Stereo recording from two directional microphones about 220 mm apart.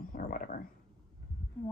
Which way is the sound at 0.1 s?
40° left (ahead or behind).